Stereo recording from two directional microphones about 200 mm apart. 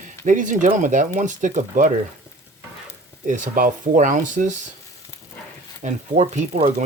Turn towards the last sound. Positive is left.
turn(degrees=-35)  # may be behind; listen again after turning